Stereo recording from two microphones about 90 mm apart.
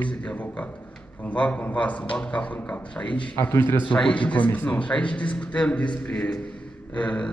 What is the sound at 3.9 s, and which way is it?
A man's voice, 10° left (ahead or behind).